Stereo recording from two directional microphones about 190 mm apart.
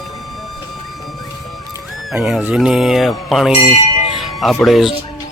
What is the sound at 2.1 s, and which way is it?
Speech, 5° right (ahead or behind).